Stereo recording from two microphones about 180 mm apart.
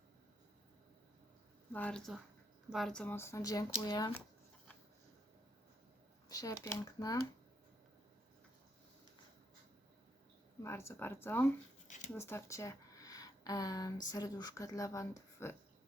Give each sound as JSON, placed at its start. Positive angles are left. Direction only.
{"t": 1.7, "sound": "speech", "side_deg": 5}
{"t": 6.2, "sound": "a woman's voice", "side_deg": 20}
{"t": 10.6, "sound": "a woman's voice", "side_deg": 15}